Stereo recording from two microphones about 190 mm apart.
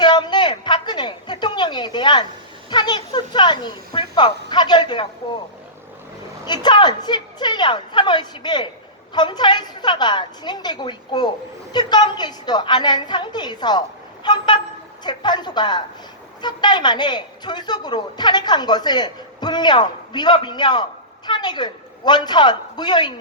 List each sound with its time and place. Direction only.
0.0 s a sound: 25° left (ahead or behind)
4.4 s a woman's voice: 25° left (ahead or behind)
6.4 s a woman's voice: 25° left (ahead or behind)